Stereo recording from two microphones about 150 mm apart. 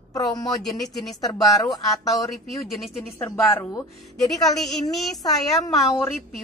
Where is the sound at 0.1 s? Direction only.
25° left (ahead or behind).